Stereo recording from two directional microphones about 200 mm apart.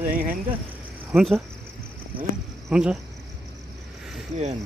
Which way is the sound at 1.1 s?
Centre (ahead or behind).